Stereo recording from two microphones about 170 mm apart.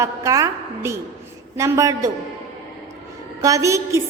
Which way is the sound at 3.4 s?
20° right (ahead or behind).